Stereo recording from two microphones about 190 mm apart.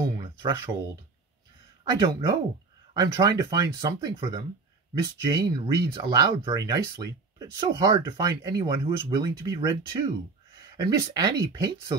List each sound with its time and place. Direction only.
1.9 s speech: 20° right (ahead or behind)